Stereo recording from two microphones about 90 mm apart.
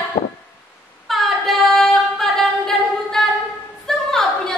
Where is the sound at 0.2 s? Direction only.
70° left (ahead or behind).